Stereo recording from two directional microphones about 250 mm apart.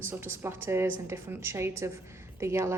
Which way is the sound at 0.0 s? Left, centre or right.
Centre.